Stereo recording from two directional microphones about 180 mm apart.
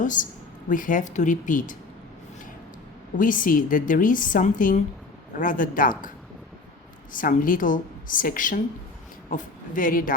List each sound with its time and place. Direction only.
0.0 s a woman's voice: 45° left (ahead or behind)
3.2 s a woman's voice: 50° left (ahead or behind)
7.1 s a woman's voice: 50° left (ahead or behind)